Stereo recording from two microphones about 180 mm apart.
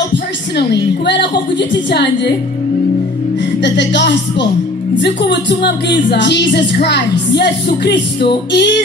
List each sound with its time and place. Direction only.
0.1 s a woman's voice: 70° left (ahead or behind)
3.6 s a woman's voice: 75° left (ahead or behind)